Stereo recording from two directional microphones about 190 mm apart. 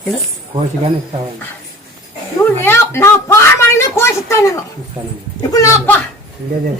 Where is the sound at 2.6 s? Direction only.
10° left (ahead or behind).